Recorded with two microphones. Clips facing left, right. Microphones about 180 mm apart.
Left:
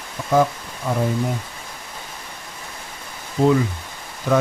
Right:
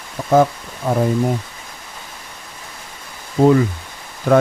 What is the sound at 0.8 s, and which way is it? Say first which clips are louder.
Speech: right 5 dB; 45° right (ahead or behind).